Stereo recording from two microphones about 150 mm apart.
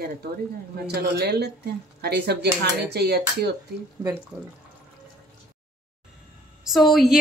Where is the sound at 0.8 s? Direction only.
90° right.